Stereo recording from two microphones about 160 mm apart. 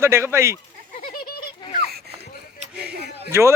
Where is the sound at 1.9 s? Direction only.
75° right (ahead or behind).